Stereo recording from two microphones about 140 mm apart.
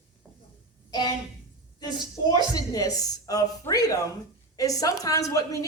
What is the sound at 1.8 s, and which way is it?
A woman's voice, 30° left (ahead or behind).